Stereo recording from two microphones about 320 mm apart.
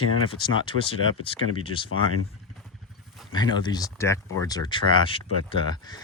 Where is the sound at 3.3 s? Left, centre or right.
Centre.